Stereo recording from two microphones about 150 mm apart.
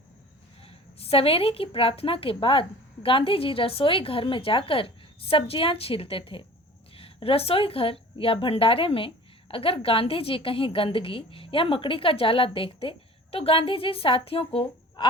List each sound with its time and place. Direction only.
0.6 s speech: 40° left (ahead or behind)